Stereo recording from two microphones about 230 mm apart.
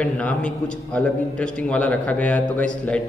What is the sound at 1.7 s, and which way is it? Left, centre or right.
A man's voice, centre.